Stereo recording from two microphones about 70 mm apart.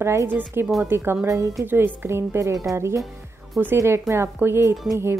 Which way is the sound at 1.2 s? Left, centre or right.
Right.